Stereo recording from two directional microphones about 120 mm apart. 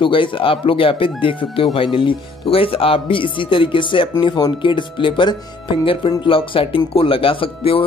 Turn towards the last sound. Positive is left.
turn(degrees=50)  # may be behind; listen again after turning